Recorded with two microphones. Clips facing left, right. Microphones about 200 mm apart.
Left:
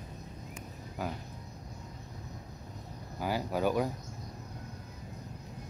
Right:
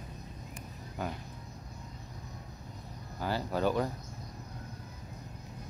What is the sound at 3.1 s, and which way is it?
Speech, 10° left (ahead or behind).